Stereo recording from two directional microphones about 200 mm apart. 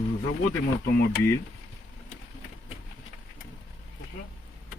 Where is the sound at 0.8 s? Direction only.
50° left (ahead or behind).